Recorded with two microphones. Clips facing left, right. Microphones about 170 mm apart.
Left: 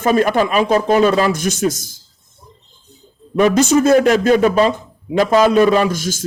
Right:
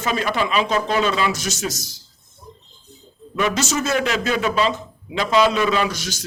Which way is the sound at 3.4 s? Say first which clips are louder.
Left 9 dB; 50° left (ahead or behind).